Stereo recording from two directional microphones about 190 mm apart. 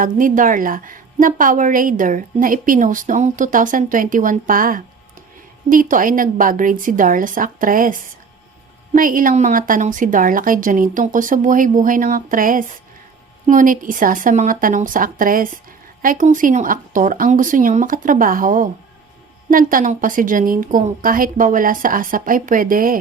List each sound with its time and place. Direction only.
0.0 s a woman's voice: 45° right (ahead or behind)